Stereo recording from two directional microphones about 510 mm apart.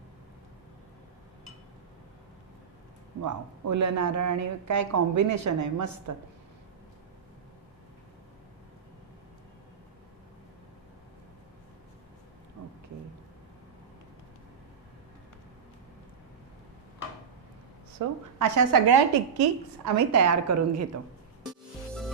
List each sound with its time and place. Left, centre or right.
3.2 s a woman's voice: right
18.0 s a woman's voice: right